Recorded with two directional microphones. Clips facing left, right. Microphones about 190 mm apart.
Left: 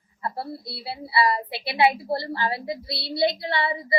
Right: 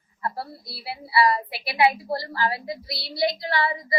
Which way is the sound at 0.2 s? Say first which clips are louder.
Left 1 dB; 25° left (ahead or behind).